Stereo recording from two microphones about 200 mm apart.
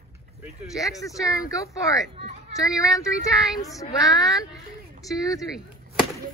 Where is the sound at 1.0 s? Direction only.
15° left (ahead or behind).